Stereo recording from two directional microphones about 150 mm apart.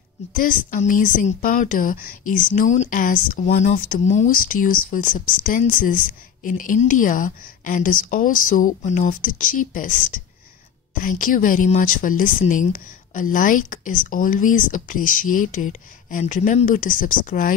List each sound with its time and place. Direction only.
0.3 s a woman's voice: 65° left (ahead or behind)
4.0 s speech: 50° left (ahead or behind); by 17.6 s 65° left (ahead or behind)